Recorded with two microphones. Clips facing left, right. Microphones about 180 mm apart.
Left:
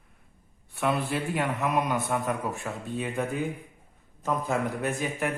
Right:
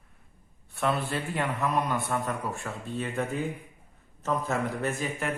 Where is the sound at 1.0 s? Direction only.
Centre (ahead or behind).